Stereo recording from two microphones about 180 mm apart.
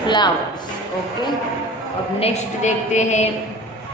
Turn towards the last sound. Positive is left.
turn(degrees=40)  # may be behind; listen again after turning